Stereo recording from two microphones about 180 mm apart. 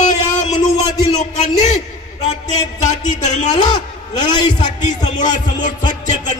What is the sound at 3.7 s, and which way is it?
Speech, 25° left (ahead or behind).